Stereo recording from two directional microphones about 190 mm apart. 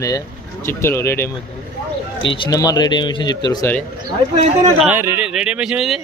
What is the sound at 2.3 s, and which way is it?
Speech, 25° left (ahead or behind).